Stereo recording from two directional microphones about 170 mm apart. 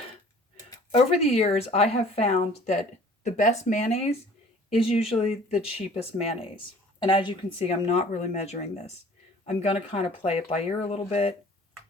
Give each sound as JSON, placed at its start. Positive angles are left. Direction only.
{"t": 0.9, "sound": "speech", "side_deg": 35}